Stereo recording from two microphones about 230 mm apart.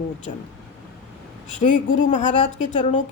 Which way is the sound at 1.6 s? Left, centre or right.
Left.